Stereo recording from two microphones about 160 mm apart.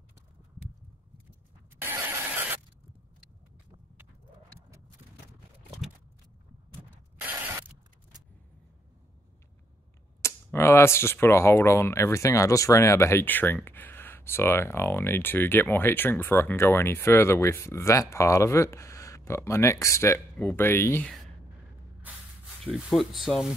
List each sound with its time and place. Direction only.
1.8 s vehicle: 15° right (ahead or behind)
7.2 s mechanisms: 10° right (ahead or behind)
10.2 s speech: 15° left (ahead or behind)
22.6 s speech: 5° right (ahead or behind)